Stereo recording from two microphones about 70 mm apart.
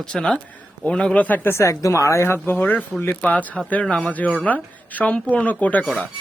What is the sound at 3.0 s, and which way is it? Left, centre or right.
A woman's voice, left.